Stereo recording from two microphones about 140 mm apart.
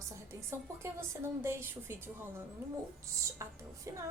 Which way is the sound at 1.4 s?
15° right (ahead or behind).